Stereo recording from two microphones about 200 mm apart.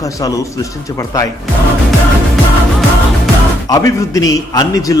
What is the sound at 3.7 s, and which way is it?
Speech, 15° left (ahead or behind).